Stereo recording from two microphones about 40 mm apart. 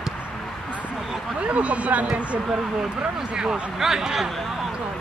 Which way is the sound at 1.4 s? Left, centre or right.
Right.